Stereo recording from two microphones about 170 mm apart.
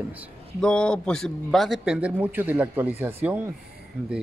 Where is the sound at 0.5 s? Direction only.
5° left (ahead or behind).